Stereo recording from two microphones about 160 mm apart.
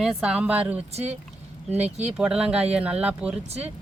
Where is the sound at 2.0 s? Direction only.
5° right (ahead or behind).